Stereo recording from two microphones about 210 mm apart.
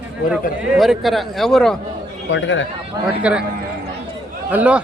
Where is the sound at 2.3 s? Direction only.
60° left (ahead or behind).